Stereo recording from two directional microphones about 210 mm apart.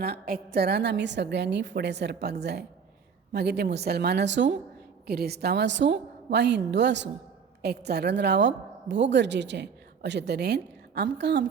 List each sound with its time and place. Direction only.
0.0 s a woman's voice: 45° right (ahead or behind)